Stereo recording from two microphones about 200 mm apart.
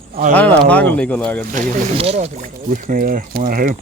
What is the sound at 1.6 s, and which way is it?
Speech, 30° right (ahead or behind).